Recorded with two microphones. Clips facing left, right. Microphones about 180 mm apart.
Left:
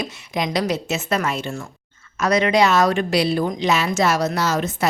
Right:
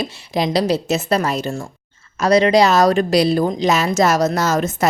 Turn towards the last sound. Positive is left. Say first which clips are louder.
# right 3 dB
turn(degrees=-45)  # may be behind; listen again after turning